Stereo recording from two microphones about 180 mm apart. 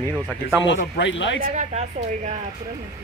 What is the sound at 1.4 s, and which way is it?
Speech, 40° right (ahead or behind).